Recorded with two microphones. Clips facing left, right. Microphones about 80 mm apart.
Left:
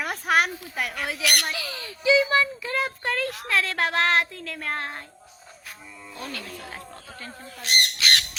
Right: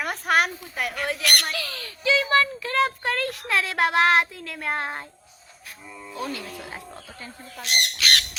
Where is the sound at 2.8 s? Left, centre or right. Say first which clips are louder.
Right 2 dB; centre.